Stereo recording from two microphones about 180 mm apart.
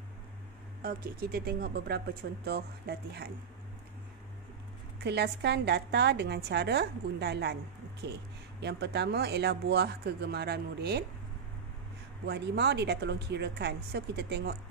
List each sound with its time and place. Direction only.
0.8 s speech: 55° right (ahead or behind)
5.0 s speech: 70° right (ahead or behind)
12.3 s speech: 65° right (ahead or behind)